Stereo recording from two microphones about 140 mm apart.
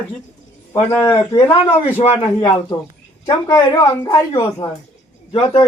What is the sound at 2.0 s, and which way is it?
Speech, 50° left (ahead or behind).